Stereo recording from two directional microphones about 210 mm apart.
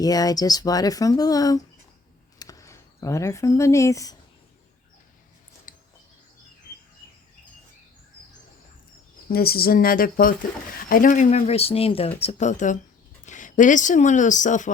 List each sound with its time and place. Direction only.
0.0 s speech: 15° left (ahead or behind)
5.7 s bird: 40° left (ahead or behind)
9.3 s speech: 45° left (ahead or behind)